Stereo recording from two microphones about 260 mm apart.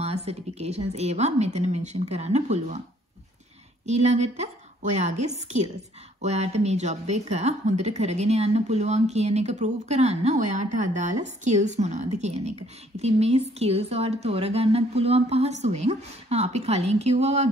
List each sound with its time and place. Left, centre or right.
0.0 s speech: right
3.8 s speech: right